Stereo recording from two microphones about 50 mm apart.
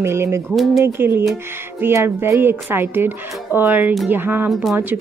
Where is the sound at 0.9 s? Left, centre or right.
Right.